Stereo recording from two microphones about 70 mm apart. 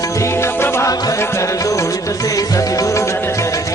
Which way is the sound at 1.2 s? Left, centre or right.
Left.